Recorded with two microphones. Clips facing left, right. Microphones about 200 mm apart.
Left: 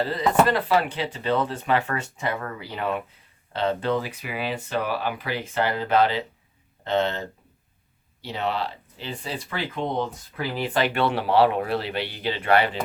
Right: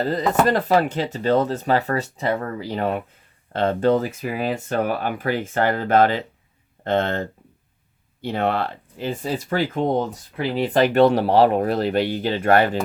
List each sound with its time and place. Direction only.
0.0 s speech: 45° right (ahead or behind)
10.3 s speech: 30° right (ahead or behind); by 12.8 s 45° right (ahead or behind)